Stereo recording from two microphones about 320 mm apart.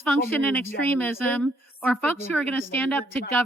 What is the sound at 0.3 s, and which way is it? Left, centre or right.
A woman's voice, centre.